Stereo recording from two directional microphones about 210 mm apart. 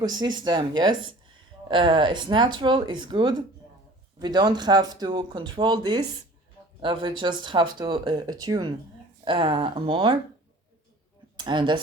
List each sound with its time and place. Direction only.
0.0 s speech: 20° right (ahead or behind)
11.3 s speech: 20° right (ahead or behind)